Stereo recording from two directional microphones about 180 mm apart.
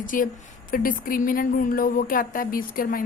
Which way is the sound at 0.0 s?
50° left (ahead or behind).